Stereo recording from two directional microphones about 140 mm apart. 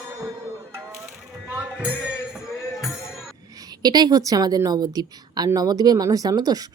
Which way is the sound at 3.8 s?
30° right (ahead or behind).